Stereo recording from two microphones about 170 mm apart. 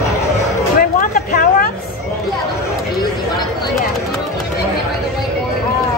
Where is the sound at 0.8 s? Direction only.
60° left (ahead or behind).